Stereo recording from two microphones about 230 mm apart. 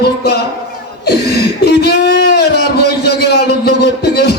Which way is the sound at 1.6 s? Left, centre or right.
Left.